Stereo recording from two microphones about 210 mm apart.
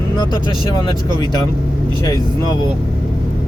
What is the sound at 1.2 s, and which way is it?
Speech, 20° left (ahead or behind).